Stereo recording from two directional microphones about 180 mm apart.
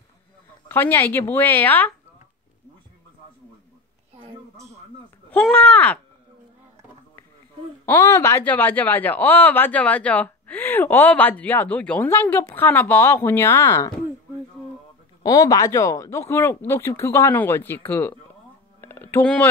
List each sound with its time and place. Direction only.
0.7 s speech: 10° left (ahead or behind)
4.2 s a sound: 35° right (ahead or behind)
5.3 s speech: 10° left (ahead or behind)
7.8 s speech: 10° left (ahead or behind)
15.2 s speech: 20° left (ahead or behind)
18.8 s a sound: 10° left (ahead or behind)